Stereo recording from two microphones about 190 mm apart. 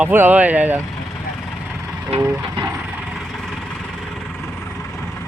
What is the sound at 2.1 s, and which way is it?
Speech, 35° right (ahead or behind).